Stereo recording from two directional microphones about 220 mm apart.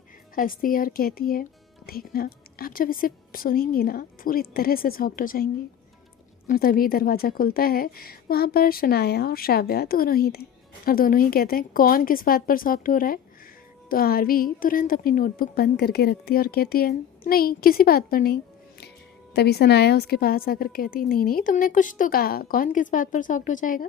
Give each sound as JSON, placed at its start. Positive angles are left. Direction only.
{"t": 0.3, "sound": "a woman's voice", "side_deg": 40}
{"t": 6.5, "sound": "a woman's voice", "side_deg": 40}